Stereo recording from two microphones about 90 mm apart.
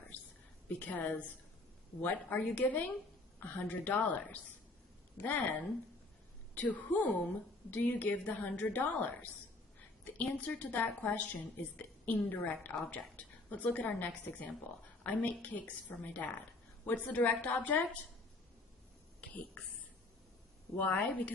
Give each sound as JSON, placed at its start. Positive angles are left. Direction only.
{"t": 0.8, "sound": "a woman's voice", "side_deg": 20}
{"t": 20.7, "sound": "a woman's voice", "side_deg": 20}